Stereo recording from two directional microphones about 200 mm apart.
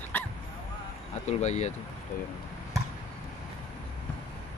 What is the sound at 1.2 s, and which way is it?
Speech, 35° left (ahead or behind).